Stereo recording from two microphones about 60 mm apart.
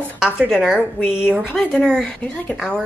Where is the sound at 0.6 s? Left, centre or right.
Centre.